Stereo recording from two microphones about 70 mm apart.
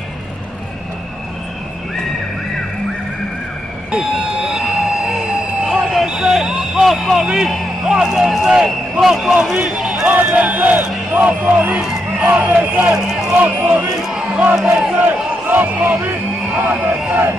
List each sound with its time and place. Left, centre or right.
4.5 s a sound: centre
5.7 s fire alarm: centre
6.0 s a sound: centre
7.8 s speech: centre
9.6 s a sound: centre
10.0 s speech: right
14.1 s crowd: centre
14.6 s speech: centre
15.0 s a man's voice: right